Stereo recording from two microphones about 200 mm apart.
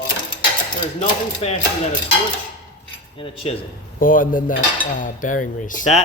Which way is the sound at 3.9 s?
45° left (ahead or behind).